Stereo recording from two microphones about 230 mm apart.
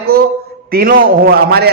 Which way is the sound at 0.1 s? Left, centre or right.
Right.